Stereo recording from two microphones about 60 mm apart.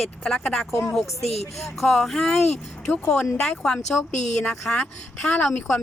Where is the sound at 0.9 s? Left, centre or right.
Centre.